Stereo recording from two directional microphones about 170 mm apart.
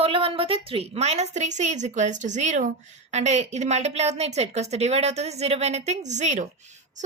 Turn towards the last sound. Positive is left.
turn(degrees=-45)  # may be behind; listen again after turning